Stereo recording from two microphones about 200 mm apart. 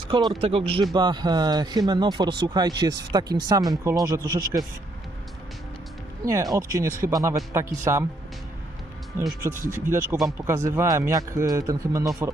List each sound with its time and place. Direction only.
0.1 s speech: 25° right (ahead or behind)
6.2 s speech: 15° right (ahead or behind)
9.4 s speech: 15° right (ahead or behind)
10.2 s speech: centre (ahead or behind)
10.4 s speech: 15° right (ahead or behind)